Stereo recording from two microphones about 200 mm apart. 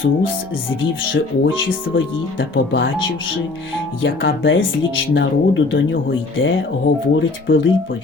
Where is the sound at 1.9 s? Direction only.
55° left (ahead or behind).